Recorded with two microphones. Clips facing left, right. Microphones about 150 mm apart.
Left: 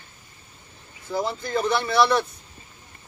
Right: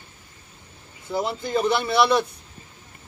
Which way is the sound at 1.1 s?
10° right (ahead or behind).